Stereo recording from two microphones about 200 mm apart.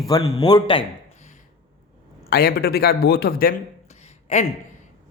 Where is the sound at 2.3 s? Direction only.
50° left (ahead or behind).